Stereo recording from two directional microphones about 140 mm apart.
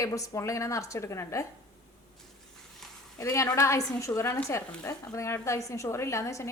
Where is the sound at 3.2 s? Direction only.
20° left (ahead or behind).